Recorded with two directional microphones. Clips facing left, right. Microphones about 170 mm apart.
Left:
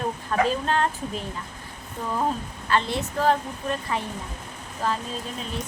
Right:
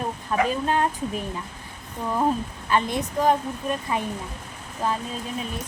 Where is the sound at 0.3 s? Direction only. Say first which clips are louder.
Right 1 dB; 10° right (ahead or behind).